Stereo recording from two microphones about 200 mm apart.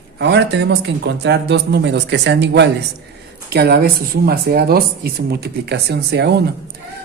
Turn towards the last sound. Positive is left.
turn(degrees=-55)  # may be behind; listen again after turning